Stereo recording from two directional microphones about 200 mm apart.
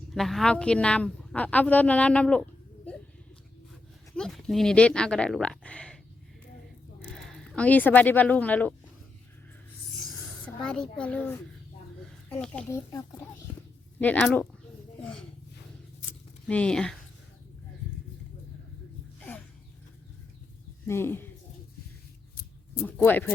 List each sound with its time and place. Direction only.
0.1 s a woman's voice: centre (ahead or behind)
4.1 s speech: centre (ahead or behind)
7.1 s speech: centre (ahead or behind)
9.9 s a sound: centre (ahead or behind)
12.3 s speech: 5° left (ahead or behind)
12.9 s speech: 20° left (ahead or behind)
16.5 s a woman's voice: 5° left (ahead or behind)
19.2 s a sound: 10° left (ahead or behind)
20.8 s speech: 10° left (ahead or behind)
22.8 s speech: 10° left (ahead or behind)